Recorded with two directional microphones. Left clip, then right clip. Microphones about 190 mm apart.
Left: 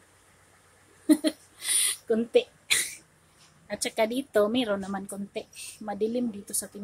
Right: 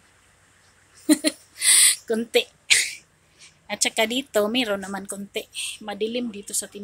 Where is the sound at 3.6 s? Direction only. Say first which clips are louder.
Right 4 dB; 5° right (ahead or behind).